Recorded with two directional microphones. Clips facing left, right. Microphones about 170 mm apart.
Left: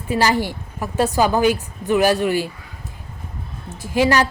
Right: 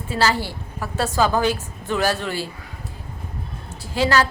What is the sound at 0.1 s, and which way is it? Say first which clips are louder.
A woman's voice: left 3 dB; 15° left (ahead or behind).